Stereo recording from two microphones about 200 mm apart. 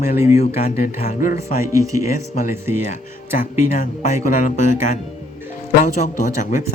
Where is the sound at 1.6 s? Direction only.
15° right (ahead or behind).